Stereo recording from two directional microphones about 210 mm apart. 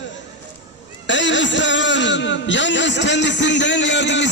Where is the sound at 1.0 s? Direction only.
60° left (ahead or behind).